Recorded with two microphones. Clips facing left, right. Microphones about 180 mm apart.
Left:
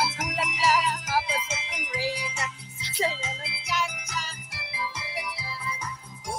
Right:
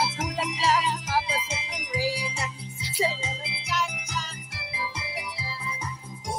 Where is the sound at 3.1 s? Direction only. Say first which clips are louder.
Right 1 dB; 30° right (ahead or behind).